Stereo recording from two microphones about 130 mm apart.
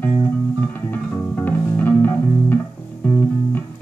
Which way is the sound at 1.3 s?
15° left (ahead or behind).